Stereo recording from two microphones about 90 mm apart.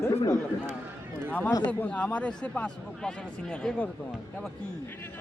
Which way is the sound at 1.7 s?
15° left (ahead or behind).